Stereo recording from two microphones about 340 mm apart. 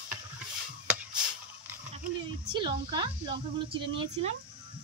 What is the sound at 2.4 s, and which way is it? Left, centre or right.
Speech, centre.